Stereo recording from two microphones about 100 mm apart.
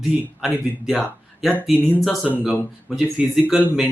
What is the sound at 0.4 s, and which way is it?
Speech, centre (ahead or behind).